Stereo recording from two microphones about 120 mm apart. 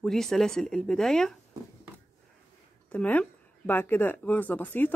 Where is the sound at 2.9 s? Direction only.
10° left (ahead or behind).